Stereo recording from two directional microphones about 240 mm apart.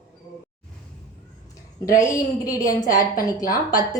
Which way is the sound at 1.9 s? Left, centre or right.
Centre.